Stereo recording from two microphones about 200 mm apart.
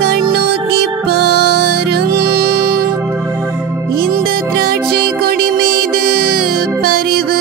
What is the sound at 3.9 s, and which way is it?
Music, 45° right (ahead or behind).